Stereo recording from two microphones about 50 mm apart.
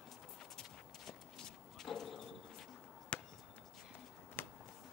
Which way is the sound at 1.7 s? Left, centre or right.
Centre.